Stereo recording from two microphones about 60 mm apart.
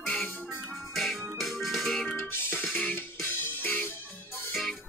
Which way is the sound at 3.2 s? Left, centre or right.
Left.